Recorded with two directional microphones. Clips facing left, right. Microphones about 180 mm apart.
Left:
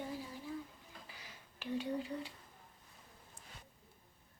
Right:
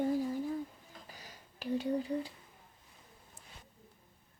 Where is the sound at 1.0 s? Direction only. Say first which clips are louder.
Right 3 dB; 40° right (ahead or behind).